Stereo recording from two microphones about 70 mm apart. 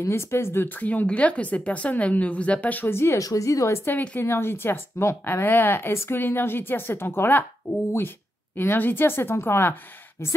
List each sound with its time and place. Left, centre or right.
0.1 s speech: left
3.2 s a woman's voice: left
3.8 s speech: left
4.2 s a woman's voice: left
8.5 s a woman's voice: left